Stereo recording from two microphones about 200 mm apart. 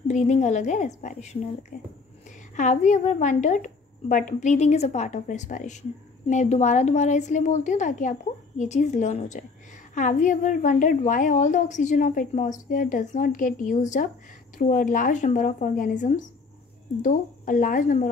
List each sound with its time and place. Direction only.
0.1 s a woman's voice: 35° left (ahead or behind)